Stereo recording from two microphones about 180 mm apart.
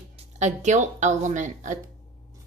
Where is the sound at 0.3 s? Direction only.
40° right (ahead or behind).